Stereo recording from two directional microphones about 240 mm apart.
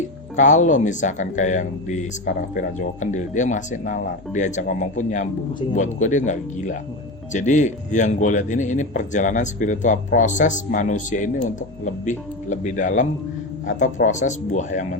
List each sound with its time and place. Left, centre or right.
0.3 s speech: left